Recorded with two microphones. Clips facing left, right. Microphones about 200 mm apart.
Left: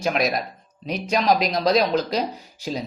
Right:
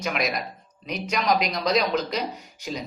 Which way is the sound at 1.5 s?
30° left (ahead or behind).